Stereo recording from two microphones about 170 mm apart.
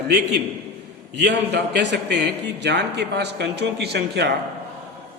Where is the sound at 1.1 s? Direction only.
90° right.